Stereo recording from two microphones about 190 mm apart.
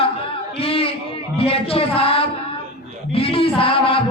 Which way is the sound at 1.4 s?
30° left (ahead or behind).